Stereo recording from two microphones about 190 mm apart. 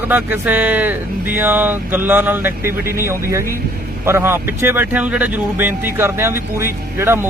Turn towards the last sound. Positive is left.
turn(degrees=-10)  # may be behind; listen again after turning